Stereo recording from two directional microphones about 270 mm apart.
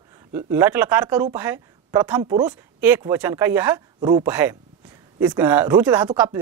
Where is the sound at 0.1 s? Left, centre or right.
Centre.